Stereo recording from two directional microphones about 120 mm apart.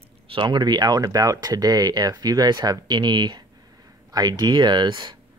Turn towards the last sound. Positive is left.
turn(degrees=-35)  # may be behind; listen again after turning